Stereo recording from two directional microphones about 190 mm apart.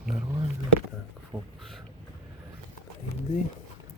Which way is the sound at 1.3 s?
5° left (ahead or behind).